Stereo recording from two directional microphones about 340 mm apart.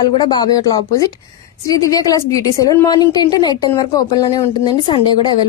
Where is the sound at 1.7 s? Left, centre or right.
Centre.